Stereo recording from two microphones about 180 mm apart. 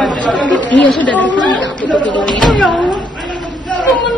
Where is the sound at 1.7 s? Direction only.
5° left (ahead or behind).